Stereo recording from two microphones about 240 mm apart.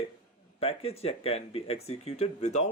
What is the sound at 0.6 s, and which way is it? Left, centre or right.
Speech, left.